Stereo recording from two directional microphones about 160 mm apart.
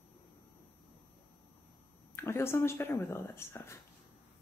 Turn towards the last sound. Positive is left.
turn(degrees=15)  # may be behind; listen again after turning